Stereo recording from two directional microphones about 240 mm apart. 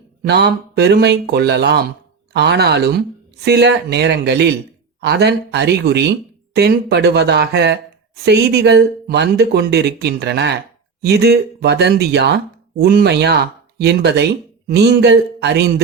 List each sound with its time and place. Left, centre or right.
0.2 s speech: right